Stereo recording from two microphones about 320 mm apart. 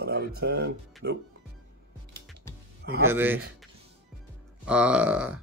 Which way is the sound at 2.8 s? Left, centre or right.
Right.